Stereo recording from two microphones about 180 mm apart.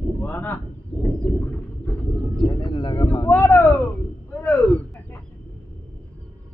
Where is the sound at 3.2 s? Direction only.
10° left (ahead or behind).